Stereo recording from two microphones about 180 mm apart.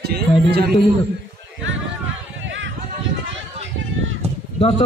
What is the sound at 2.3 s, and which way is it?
Run, 90° right.